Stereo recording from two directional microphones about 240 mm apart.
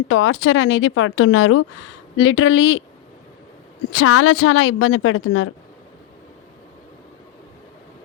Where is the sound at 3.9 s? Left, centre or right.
Left.